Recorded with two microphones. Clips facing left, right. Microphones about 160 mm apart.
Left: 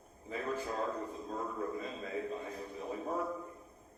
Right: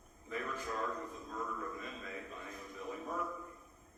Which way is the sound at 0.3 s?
30° left (ahead or behind).